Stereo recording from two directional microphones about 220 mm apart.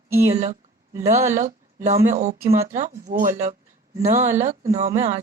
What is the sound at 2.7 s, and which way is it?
Speech, 35° right (ahead or behind).